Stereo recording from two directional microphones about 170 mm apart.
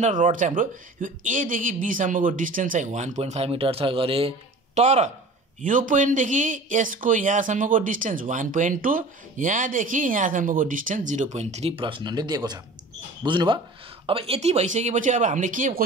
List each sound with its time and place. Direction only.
0.0 s speech: 50° right (ahead or behind)